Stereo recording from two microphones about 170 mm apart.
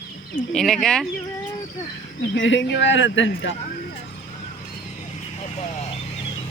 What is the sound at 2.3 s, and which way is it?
Speech, 90° left.